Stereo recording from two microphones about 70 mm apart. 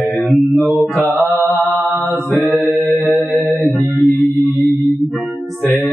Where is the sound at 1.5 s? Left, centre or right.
Centre.